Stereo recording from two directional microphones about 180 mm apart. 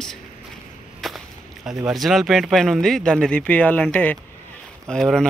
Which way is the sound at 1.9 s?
Centre (ahead or behind).